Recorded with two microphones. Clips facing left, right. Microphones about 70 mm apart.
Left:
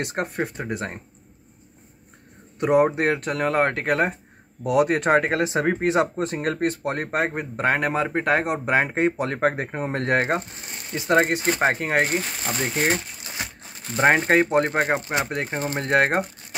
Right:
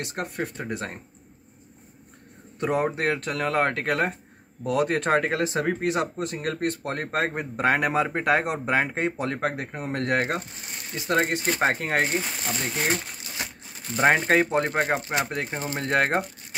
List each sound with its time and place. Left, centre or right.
0.1 s speech: left
0.6 s speech: centre
2.6 s speech: centre; by 6.4 s left
6.4 s speech: left; by 8.5 s centre
8.5 s speech: centre
9.4 s speech: left
11.2 s speech: centre
12.4 s speech: left
13.9 s speech: centre